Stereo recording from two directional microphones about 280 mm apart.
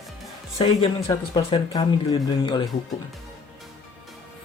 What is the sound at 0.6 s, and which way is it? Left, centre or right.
Speech, left.